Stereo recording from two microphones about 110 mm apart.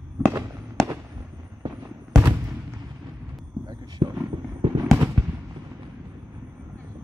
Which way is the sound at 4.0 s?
45° right (ahead or behind).